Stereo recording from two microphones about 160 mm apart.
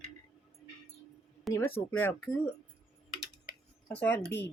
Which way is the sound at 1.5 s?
15° left (ahead or behind).